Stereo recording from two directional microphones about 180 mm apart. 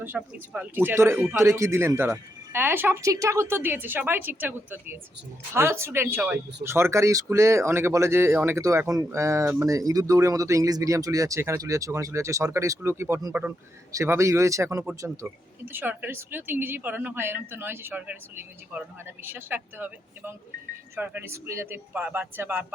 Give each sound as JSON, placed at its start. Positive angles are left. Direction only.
{"t": 0.0, "sound": "speech", "side_deg": -10}